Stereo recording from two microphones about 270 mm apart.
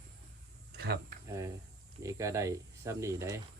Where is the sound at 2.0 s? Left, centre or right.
Centre.